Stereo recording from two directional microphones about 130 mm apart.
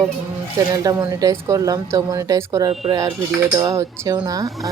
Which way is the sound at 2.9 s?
30° right (ahead or behind).